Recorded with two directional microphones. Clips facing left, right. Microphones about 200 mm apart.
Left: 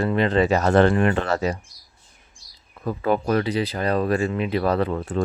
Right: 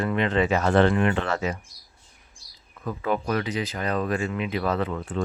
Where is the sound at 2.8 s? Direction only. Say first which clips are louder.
Left 4 dB; 35° left (ahead or behind).